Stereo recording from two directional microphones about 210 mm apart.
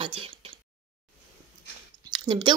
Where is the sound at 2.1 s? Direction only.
20° right (ahead or behind).